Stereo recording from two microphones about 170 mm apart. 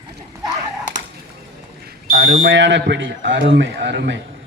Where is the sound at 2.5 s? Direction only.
90° right.